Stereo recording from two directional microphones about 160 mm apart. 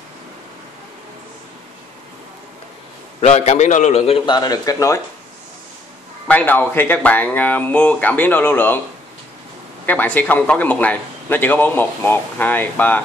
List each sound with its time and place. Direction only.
3.2 s a man's voice: 40° left (ahead or behind); by 5.0 s 20° left (ahead or behind)
6.2 s a man's voice: 10° left (ahead or behind)
9.8 s a man's voice: 10° left (ahead or behind)